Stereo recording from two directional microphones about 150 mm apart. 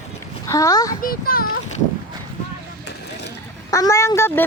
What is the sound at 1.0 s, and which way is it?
Speech, 80° left.